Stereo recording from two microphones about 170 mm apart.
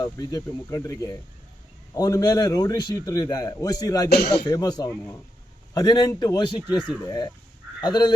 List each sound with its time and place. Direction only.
0.0 s a man's voice: 20° left (ahead or behind)
6.6 s speech: 10° right (ahead or behind)
6.8 s a man's voice: 25° left (ahead or behind)